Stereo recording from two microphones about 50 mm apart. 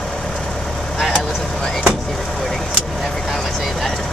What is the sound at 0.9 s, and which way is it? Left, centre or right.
Vehicle, centre.